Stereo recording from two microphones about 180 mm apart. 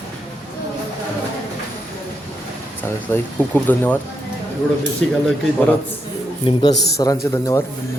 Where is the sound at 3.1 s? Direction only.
10° left (ahead or behind).